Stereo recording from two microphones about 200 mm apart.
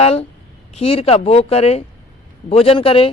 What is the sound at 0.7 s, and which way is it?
Speech, 30° left (ahead or behind).